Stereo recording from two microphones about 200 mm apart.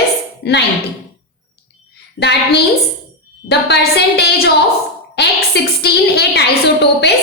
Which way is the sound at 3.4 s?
55° left (ahead or behind).